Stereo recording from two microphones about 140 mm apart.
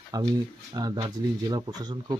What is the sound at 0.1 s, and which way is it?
Speech, 30° right (ahead or behind).